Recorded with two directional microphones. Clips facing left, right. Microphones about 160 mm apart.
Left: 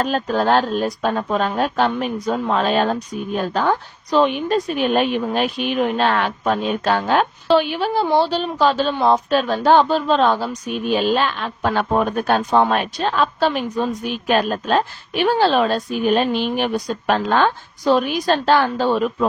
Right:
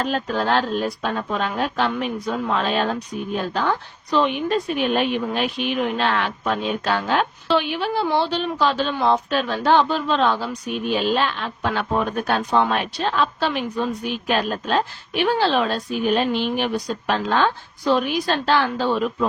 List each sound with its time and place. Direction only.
0.0 s speech: 40° left (ahead or behind)